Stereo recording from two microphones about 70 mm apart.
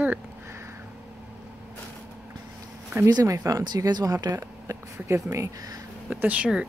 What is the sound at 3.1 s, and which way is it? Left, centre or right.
Speech, right.